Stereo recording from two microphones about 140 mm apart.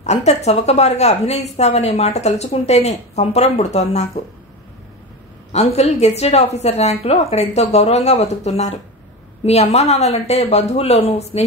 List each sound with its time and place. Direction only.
0.0 s a woman's voice: 50° left (ahead or behind)
5.5 s a woman's voice: 50° left (ahead or behind)